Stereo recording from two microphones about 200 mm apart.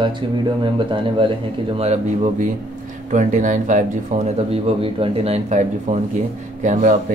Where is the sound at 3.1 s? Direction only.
40° right (ahead or behind).